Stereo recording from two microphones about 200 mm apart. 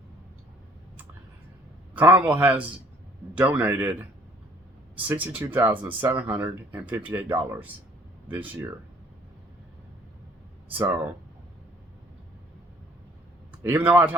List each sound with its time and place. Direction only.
1.9 s a man's voice: 10° right (ahead or behind)
5.0 s speech: 10° right (ahead or behind)
10.7 s speech: 10° right (ahead or behind)
13.6 s speech: 10° right (ahead or behind)